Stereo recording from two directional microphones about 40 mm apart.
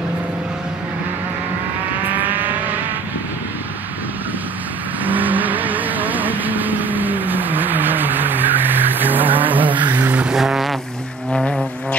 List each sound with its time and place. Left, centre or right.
2.1 s vehicle: right
5.0 s vehicle: right
10.3 s a sound: centre